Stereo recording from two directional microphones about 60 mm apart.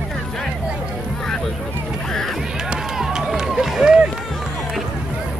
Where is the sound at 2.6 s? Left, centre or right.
Centre.